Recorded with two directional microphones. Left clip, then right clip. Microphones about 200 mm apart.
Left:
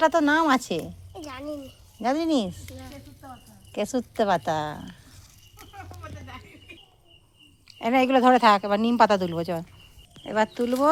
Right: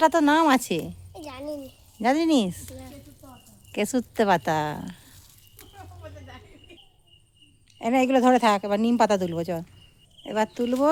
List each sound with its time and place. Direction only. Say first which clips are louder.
0.0 s speech: right 1 dB; 15° right (ahead or behind)
1.2 s a sound: even; 10° right (ahead or behind)
2.0 s speech: right 3 dB; 25° right (ahead or behind)
7.8 s speech: left 1 dB; 15° right (ahead or behind)